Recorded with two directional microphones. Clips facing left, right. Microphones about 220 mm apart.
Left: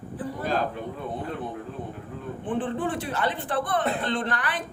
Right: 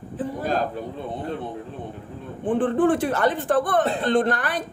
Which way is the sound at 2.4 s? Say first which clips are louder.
Right 9 dB; 50° right (ahead or behind).